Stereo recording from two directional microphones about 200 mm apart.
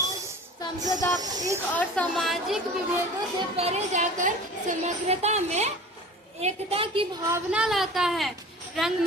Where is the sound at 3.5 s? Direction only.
30° right (ahead or behind).